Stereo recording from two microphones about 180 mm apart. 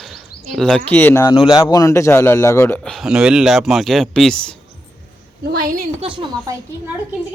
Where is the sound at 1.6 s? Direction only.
20° left (ahead or behind).